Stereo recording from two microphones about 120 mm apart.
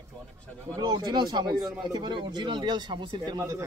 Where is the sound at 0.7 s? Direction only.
35° right (ahead or behind).